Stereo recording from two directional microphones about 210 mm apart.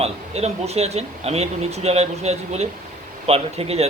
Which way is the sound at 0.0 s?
30° right (ahead or behind).